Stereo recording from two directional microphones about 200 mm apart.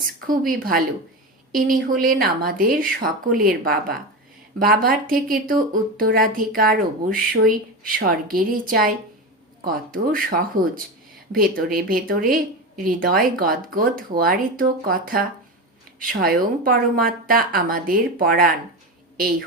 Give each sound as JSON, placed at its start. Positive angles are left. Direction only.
{"t": 0.0, "sound": "a woman's voice", "side_deg": -45}